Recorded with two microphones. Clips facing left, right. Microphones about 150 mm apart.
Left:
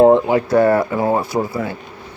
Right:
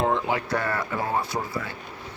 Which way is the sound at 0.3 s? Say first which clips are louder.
Left 13 dB; 30° left (ahead or behind).